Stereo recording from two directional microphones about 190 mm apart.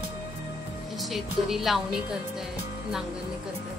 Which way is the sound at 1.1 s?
Centre (ahead or behind).